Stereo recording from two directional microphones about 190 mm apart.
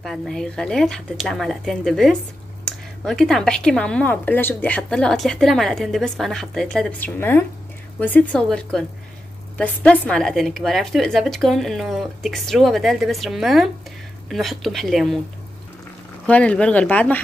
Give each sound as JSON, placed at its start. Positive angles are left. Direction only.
{"t": 0.0, "sound": "speech", "side_deg": 0}
{"t": 16.3, "sound": "speech", "side_deg": 5}